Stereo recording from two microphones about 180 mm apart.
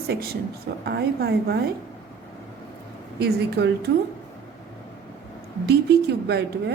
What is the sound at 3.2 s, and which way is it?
Speech, 65° right (ahead or behind).